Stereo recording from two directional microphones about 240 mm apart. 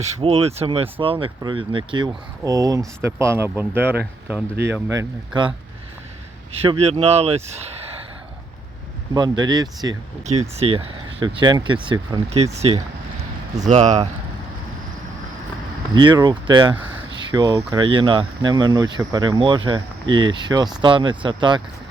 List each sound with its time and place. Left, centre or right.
0.0 s speech: right
6.5 s speech: right
9.1 s speech: centre
16.0 s speech: centre